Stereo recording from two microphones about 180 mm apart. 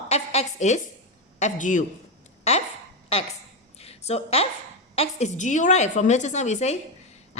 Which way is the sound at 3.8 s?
35° left (ahead or behind).